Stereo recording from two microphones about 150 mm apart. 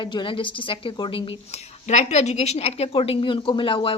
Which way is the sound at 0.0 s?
30° left (ahead or behind).